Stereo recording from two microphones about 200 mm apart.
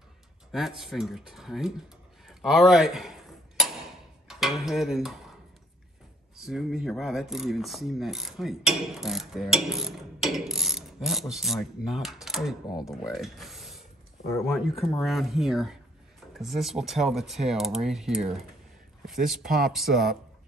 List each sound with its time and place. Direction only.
0.5 s mechanisms: centre (ahead or behind)
2.2 s dishes: centre (ahead or behind)
6.4 s mechanisms: centre (ahead or behind)
12.6 s speech: 20° left (ahead or behind)
12.9 s speech: centre (ahead or behind)
14.4 s mechanisms: centre (ahead or behind)